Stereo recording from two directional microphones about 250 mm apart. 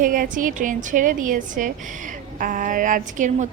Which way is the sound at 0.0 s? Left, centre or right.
Right.